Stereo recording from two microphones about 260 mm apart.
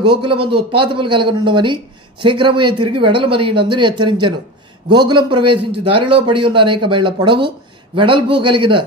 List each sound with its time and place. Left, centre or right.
0.0 s a man's voice: centre